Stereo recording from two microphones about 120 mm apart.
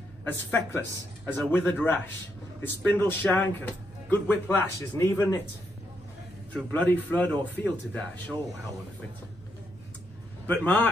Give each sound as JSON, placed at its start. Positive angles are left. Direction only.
{"t": 0.2, "sound": "speech", "side_deg": 15}
{"t": 2.6, "sound": "speech", "side_deg": 15}
{"t": 6.5, "sound": "speech", "side_deg": 15}
{"t": 10.4, "sound": "speech", "side_deg": 15}